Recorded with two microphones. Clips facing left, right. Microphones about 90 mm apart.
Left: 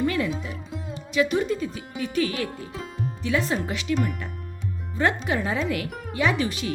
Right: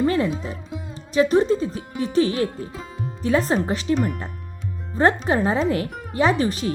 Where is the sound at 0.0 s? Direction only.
35° right (ahead or behind).